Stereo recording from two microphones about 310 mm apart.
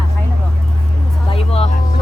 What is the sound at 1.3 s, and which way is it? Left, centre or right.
Vehicle, centre.